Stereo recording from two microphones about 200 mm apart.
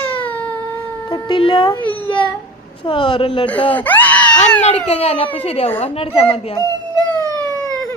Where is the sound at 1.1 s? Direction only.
25° left (ahead or behind).